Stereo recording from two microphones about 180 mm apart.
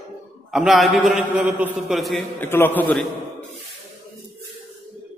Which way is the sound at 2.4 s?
10° left (ahead or behind).